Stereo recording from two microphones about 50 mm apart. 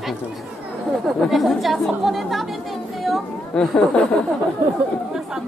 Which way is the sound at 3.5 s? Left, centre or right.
Left.